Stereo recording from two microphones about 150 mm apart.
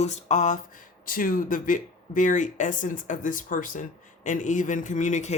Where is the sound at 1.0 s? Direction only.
65° left (ahead or behind).